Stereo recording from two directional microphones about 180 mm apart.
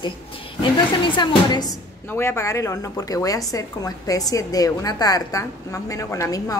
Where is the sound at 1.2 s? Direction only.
25° left (ahead or behind).